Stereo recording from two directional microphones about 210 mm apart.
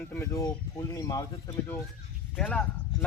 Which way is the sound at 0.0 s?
10° left (ahead or behind).